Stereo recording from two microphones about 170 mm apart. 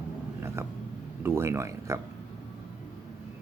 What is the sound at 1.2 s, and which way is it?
Speech, 15° right (ahead or behind).